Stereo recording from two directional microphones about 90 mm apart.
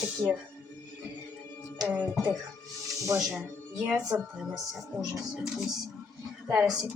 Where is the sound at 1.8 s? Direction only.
20° right (ahead or behind).